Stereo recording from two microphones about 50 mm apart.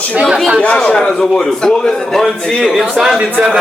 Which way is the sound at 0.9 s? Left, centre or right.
Centre.